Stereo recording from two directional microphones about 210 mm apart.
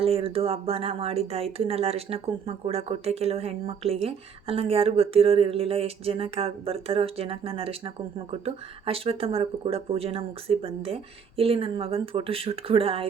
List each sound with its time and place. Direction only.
0.0 s speech: 25° right (ahead or behind)